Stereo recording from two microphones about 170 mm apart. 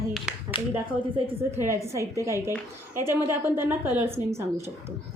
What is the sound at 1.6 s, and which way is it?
A woman's voice, 15° right (ahead or behind).